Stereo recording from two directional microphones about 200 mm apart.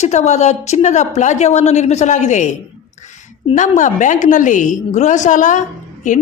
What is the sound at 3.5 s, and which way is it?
A woman's voice, 35° left (ahead or behind).